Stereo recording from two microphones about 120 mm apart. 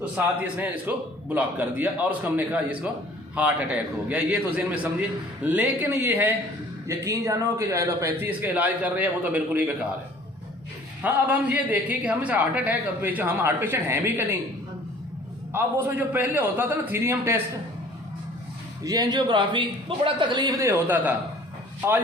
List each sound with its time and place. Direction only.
0.4 s a man's voice: 10° right (ahead or behind)
11.0 s a man's voice: 10° right (ahead or behind)
15.5 s a man's voice: 15° right (ahead or behind)
18.8 s speech: 30° right (ahead or behind)
20.8 s a man's voice: 15° right (ahead or behind)